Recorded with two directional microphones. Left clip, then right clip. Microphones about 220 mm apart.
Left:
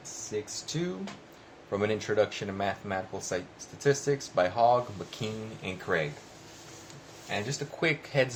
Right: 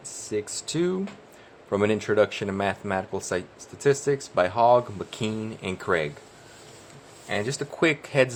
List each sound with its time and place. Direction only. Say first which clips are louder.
0.3 s speech: right 6 dB; 45° right (ahead or behind)
7.3 s speech: right 5 dB; 45° right (ahead or behind)